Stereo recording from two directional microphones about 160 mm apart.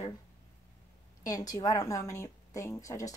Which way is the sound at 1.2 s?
25° left (ahead or behind).